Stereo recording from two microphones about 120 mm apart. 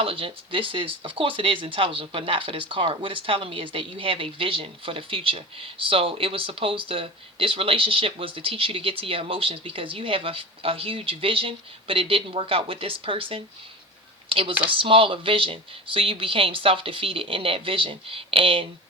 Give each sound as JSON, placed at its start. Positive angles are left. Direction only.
{"t": 0.0, "sound": "speech", "side_deg": -50}